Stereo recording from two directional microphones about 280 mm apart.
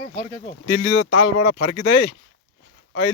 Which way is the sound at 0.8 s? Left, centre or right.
Left.